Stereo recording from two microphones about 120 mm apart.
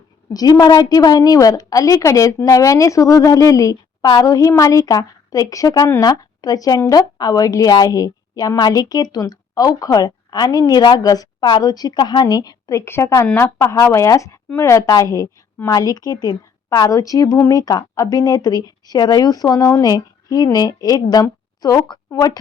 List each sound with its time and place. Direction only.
0.3 s a woman's voice: 35° left (ahead or behind)